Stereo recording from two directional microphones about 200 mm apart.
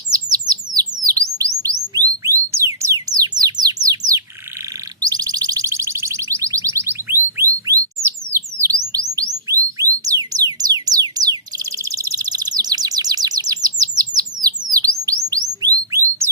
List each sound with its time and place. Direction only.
0.1 s chirp: 20° right (ahead or behind)
1.0 s bird: 15° right (ahead or behind)
4.9 s a sound: 20° right (ahead or behind)
8.5 s bird: 15° right (ahead or behind)
8.9 s music: 20° right (ahead or behind)
14.7 s bird: 20° right (ahead or behind)